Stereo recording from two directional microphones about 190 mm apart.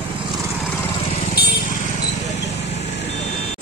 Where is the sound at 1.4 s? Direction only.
55° left (ahead or behind).